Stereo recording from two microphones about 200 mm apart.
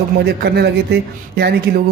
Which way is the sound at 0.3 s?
55° right (ahead or behind).